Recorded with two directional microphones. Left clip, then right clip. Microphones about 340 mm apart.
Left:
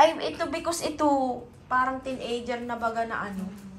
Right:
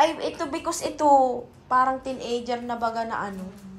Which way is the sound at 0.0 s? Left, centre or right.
Centre.